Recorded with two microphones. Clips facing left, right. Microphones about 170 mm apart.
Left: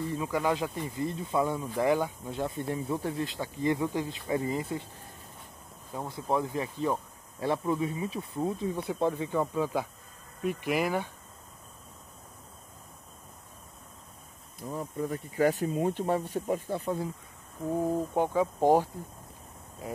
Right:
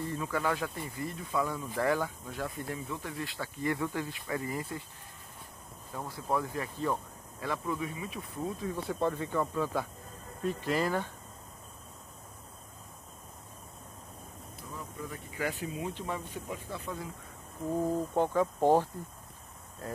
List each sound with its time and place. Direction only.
0.1 s speech: 15° left (ahead or behind)
5.9 s speech: 20° left (ahead or behind)
14.7 s speech: 45° left (ahead or behind)
17.7 s speech: 10° left (ahead or behind)